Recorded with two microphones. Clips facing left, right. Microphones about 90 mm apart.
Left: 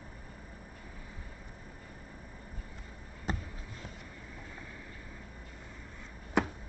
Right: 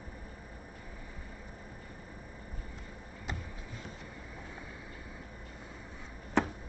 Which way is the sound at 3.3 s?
40° left (ahead or behind).